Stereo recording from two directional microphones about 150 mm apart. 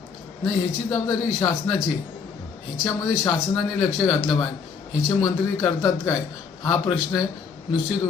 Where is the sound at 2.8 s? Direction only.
20° left (ahead or behind).